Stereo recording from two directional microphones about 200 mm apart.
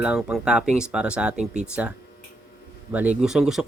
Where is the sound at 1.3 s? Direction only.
35° right (ahead or behind).